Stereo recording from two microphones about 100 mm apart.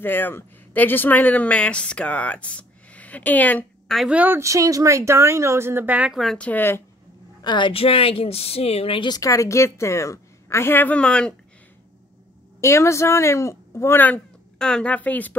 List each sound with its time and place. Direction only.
0.0 s speech: 20° left (ahead or behind)
4.1 s speech: 15° right (ahead or behind)
4.4 s speech: 30° right (ahead or behind); by 6.1 s 15° right (ahead or behind)
6.3 s speech: 15° left (ahead or behind)
7.4 s a woman's voice: 50° left (ahead or behind)
7.7 s speech: 70° left (ahead or behind)
9.1 s a woman's voice: 35° left (ahead or behind); by 11.3 s 10° left (ahead or behind)
12.5 s speech: 30° left (ahead or behind)